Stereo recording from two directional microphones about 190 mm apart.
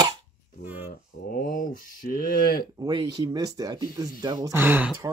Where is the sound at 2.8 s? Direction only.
20° right (ahead or behind).